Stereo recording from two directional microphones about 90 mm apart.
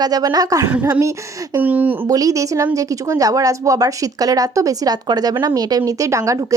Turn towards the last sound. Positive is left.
turn(degrees=-40)  # may be behind; listen again after turning